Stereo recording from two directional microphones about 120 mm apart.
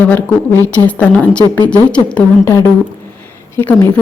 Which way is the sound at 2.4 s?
20° left (ahead or behind).